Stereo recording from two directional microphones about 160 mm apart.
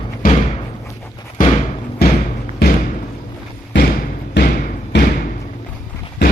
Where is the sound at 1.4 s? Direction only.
55° left (ahead or behind).